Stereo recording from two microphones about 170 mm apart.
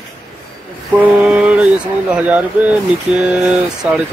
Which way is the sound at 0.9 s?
10° right (ahead or behind).